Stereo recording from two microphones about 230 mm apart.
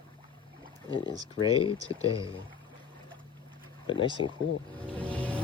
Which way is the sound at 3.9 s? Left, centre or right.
Left.